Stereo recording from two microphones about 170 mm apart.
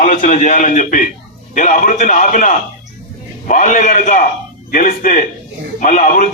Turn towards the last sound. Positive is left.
turn(degrees=50)  # may be behind; listen again after turning